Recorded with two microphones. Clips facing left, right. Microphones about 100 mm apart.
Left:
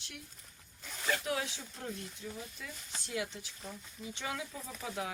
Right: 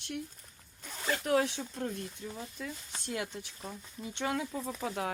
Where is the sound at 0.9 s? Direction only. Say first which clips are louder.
Right 4 dB; 40° right (ahead or behind).